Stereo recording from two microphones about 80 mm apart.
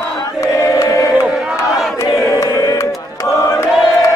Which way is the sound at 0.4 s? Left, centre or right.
Left.